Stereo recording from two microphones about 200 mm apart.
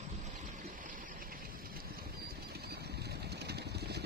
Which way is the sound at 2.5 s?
50° right (ahead or behind).